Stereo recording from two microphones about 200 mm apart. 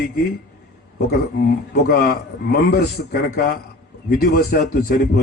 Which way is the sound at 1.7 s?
50° left (ahead or behind).